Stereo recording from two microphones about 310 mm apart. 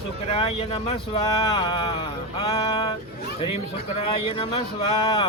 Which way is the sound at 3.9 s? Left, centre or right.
Centre.